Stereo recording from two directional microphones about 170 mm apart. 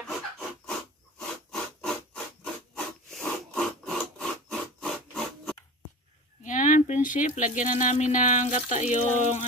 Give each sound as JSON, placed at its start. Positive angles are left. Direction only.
{"t": 0.0, "sound": "a sound", "side_deg": 5}
{"t": 3.1, "sound": "wood", "side_deg": 5}
{"t": 6.4, "sound": "speech", "side_deg": 50}